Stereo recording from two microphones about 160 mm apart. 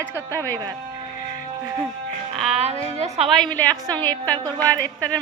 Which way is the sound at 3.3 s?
5° left (ahead or behind).